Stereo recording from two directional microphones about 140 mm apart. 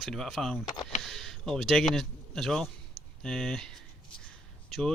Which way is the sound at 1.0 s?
Centre (ahead or behind).